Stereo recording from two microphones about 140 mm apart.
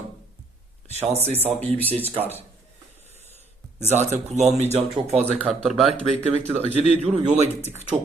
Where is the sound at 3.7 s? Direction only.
55° right (ahead or behind).